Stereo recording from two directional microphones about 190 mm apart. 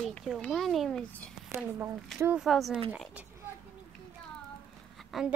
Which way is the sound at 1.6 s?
10° right (ahead or behind).